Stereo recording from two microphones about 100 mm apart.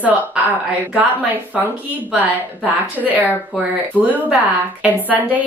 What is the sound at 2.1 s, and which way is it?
Speech, 15° right (ahead or behind).